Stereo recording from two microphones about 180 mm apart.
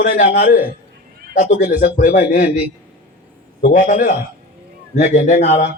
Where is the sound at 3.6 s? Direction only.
45° left (ahead or behind).